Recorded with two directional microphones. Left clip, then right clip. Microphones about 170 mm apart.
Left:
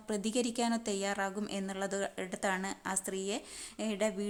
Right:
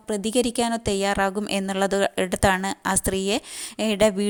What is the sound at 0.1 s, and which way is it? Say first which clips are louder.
A woman's voice: right 11 dB; 40° right (ahead or behind).